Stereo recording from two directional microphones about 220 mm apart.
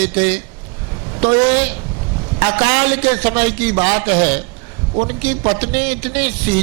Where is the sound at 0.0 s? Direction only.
10° right (ahead or behind).